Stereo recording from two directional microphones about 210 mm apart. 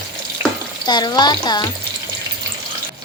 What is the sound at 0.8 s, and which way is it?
Speech, 20° left (ahead or behind).